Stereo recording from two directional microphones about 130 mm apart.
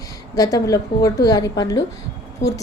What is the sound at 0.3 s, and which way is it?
A woman's voice, 25° left (ahead or behind).